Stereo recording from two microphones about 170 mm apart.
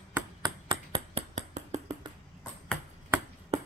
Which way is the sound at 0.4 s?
30° right (ahead or behind).